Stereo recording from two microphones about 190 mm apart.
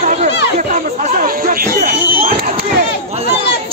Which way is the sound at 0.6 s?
40° right (ahead or behind).